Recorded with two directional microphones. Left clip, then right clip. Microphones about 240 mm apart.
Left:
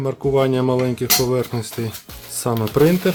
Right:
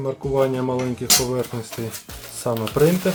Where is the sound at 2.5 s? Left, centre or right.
Left.